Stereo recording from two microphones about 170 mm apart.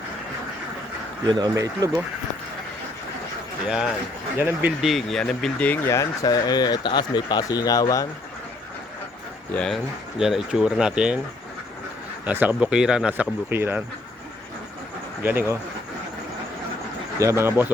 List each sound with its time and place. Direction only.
1.3 s speech: 25° right (ahead or behind)
3.7 s speech: 5° right (ahead or behind); by 8.0 s 20° left (ahead or behind)
9.6 s speech: centre (ahead or behind)
12.2 s speech: 10° right (ahead or behind)
15.2 s speech: 10° right (ahead or behind)
17.2 s speech: 15° right (ahead or behind)